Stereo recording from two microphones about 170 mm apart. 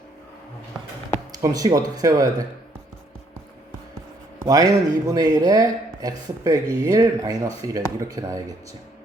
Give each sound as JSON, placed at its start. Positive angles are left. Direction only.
{"t": 1.4, "sound": "speech", "side_deg": -20}
{"t": 4.4, "sound": "speech", "side_deg": -20}